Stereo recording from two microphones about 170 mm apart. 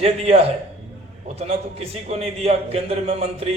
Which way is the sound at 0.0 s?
35° right (ahead or behind).